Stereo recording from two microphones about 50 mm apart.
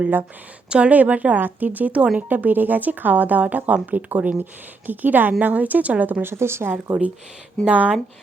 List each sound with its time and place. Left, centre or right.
0.7 s a woman's voice: right
6.2 s speech: right
6.9 s a woman's voice: right